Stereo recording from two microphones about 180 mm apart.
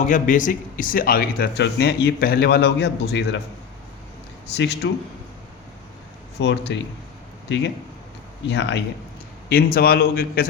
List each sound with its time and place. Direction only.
0.1 s speech: 45° left (ahead or behind); by 3.4 s 75° left (ahead or behind)
4.5 s speech: 70° left (ahead or behind)
6.4 s speech: 75° left (ahead or behind)
9.5 s speech: 55° left (ahead or behind)